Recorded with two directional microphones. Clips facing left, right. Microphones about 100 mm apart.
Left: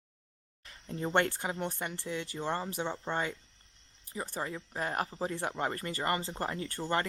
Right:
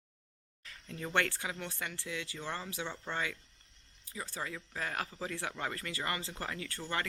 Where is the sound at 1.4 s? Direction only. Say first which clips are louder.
Left 5 dB; 40° left (ahead or behind).